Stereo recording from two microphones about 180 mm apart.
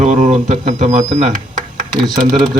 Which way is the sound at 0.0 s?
40° right (ahead or behind).